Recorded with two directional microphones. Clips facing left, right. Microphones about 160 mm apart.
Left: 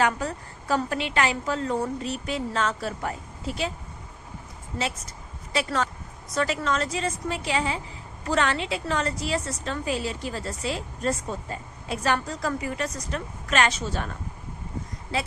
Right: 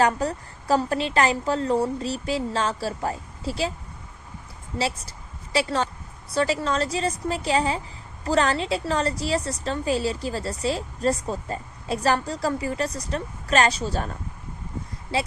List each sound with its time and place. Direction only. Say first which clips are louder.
0.0 s a woman's voice: right 3 dB; 35° right (ahead or behind)
4.8 s a woman's voice: right 3 dB; 35° right (ahead or behind)